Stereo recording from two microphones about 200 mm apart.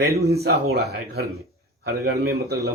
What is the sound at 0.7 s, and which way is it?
Speech, 55° right (ahead or behind).